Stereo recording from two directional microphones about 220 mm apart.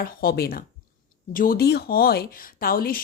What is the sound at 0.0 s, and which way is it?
Speech, 45° left (ahead or behind).